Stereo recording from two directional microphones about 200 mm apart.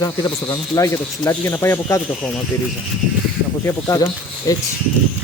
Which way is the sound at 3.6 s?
15° left (ahead or behind).